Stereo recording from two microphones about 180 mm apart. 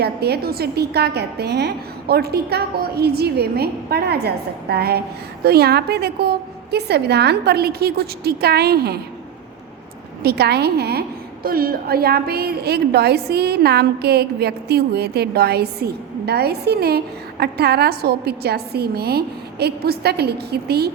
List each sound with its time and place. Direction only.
0.0 s a woman's voice: 65° right (ahead or behind)
10.2 s a woman's voice: 65° right (ahead or behind)